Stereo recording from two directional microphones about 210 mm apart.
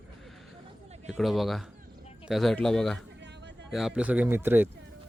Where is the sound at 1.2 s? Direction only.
Centre (ahead or behind).